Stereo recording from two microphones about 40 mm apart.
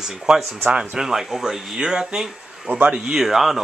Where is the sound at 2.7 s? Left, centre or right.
Right.